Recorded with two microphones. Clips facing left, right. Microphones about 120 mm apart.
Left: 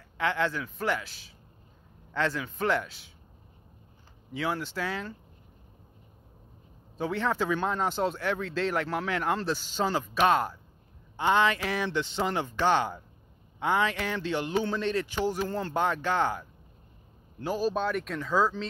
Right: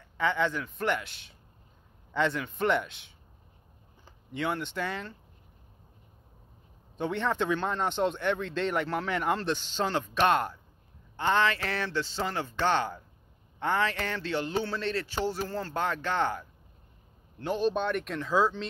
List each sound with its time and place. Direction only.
0.0 s speech: centre (ahead or behind)
4.3 s speech: 5° left (ahead or behind)
7.0 s speech: 5° left (ahead or behind)